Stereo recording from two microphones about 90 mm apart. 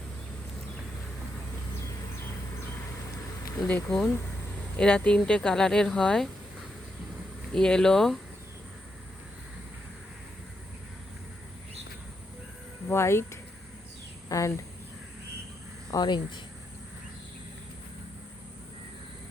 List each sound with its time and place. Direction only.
3.8 s speech: 10° left (ahead or behind)
7.5 s speech: 10° left (ahead or behind)
12.9 s speech: 30° left (ahead or behind)
15.9 s speech: 55° left (ahead or behind)